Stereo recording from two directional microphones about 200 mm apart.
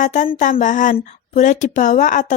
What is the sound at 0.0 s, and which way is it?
A woman's voice, 40° left (ahead or behind).